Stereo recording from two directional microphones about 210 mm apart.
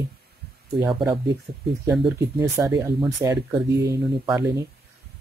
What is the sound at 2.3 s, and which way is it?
Speech, 15° right (ahead or behind).